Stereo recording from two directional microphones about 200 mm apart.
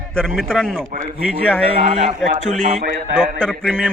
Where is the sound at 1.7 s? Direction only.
40° right (ahead or behind).